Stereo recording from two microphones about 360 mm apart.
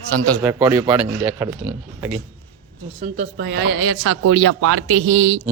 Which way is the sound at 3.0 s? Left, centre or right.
Right.